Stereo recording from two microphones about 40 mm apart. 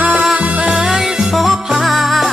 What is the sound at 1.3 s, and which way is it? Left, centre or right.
Music, centre.